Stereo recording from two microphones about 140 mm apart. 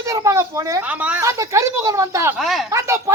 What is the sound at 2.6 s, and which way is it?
Speech, 20° right (ahead or behind).